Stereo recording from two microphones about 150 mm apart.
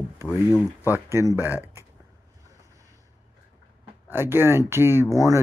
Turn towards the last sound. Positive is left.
turn(degrees=-20)  # may be behind; listen again after turning